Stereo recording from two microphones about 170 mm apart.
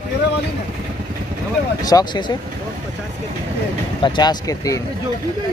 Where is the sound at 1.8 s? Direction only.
25° left (ahead or behind).